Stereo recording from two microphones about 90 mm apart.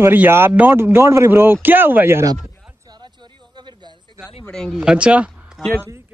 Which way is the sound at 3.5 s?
55° right (ahead or behind).